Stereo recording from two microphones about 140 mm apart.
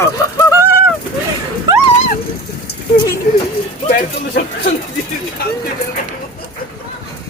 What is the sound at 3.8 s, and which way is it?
Speech, 70° left (ahead or behind).